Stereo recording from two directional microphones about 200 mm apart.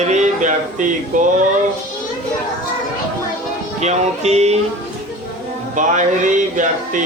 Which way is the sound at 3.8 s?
35° right (ahead or behind).